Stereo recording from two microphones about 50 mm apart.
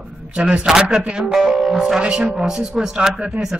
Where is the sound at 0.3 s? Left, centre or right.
Right.